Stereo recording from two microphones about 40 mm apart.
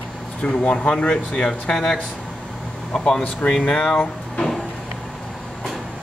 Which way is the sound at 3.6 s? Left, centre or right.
Left.